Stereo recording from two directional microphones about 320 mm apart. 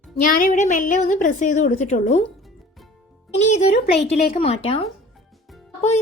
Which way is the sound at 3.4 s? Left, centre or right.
Left.